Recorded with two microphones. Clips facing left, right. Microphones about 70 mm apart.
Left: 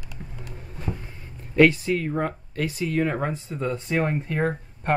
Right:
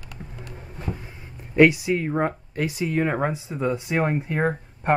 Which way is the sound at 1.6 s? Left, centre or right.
Centre.